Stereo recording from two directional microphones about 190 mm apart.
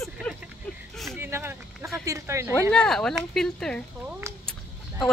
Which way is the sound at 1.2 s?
15° right (ahead or behind).